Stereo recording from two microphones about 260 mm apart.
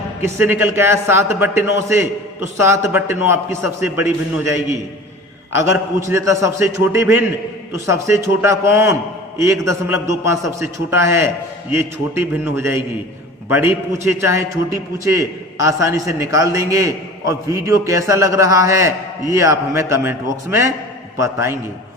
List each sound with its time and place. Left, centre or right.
0.2 s a man's voice: centre